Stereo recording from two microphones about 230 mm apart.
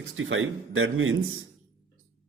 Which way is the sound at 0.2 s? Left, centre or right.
Right.